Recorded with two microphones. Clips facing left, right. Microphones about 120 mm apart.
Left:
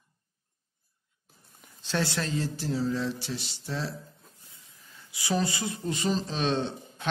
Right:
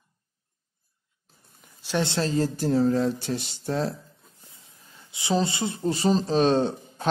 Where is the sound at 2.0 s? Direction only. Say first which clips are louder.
Right 6 dB; 30° right (ahead or behind); by 3.9 s 50° right (ahead or behind).